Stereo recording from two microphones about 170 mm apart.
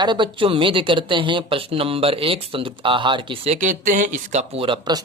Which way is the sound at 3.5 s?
45° right (ahead or behind).